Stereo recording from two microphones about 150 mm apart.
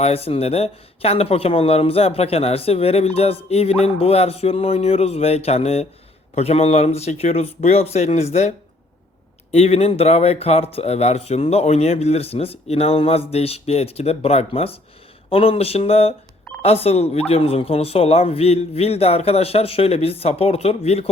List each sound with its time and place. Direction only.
0.0 s speech: 40° left (ahead or behind)